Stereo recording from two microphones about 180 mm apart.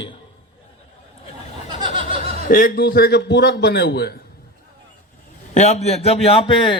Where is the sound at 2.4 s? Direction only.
50° left (ahead or behind).